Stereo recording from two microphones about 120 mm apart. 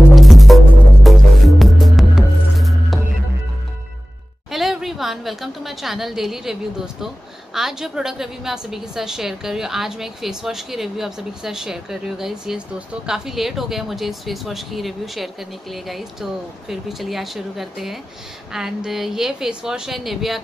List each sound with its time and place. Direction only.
0.1 s music: centre (ahead or behind)
4.5 s a sound: centre (ahead or behind)
7.5 s a woman's voice: 5° right (ahead or behind)